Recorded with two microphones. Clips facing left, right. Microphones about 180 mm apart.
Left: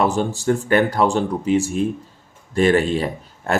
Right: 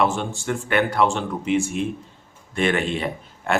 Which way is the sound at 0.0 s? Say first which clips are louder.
Left 3 dB; 40° left (ahead or behind).